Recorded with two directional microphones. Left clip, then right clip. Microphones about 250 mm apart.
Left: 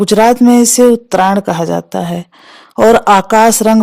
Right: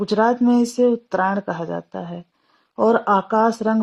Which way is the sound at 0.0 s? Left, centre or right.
Left.